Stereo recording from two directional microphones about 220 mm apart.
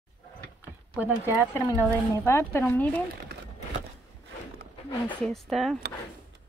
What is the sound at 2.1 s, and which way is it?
Speech, 10° left (ahead or behind).